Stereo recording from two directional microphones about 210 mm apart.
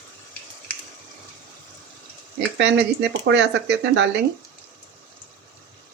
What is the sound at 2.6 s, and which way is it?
Speech, 55° right (ahead or behind).